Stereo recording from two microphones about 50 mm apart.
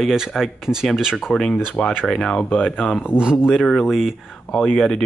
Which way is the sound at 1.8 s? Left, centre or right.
Left.